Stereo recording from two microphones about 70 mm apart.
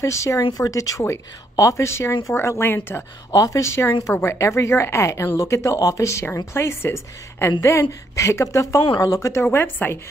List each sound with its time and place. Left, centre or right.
0.0 s a woman's voice: left
3.3 s a woman's voice: left
8.9 s speech: left